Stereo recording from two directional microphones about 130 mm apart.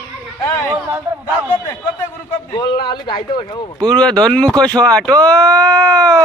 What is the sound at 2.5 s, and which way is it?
Speech, 35° left (ahead or behind).